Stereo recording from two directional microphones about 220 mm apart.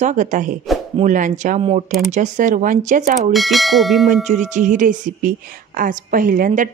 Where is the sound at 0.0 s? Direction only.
35° right (ahead or behind).